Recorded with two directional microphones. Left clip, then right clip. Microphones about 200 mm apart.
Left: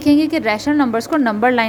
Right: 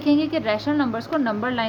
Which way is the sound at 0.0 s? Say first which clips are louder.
Left 6 dB; 30° left (ahead or behind).